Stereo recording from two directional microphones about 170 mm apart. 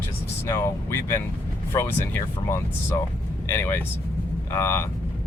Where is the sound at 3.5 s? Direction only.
15° left (ahead or behind).